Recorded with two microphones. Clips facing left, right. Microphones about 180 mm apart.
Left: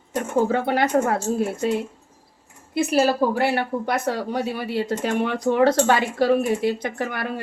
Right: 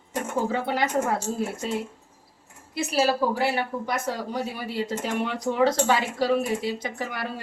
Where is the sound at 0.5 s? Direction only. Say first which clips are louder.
Left 5 dB; 60° left (ahead or behind).